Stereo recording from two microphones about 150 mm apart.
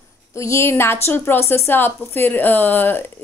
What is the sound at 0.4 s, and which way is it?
A woman's voice, 20° left (ahead or behind).